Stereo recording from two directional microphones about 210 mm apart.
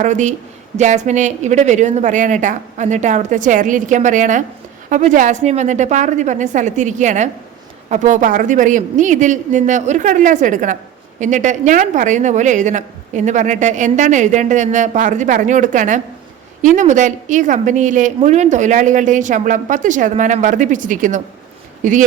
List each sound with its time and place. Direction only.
0.0 s a woman's voice: 35° right (ahead or behind)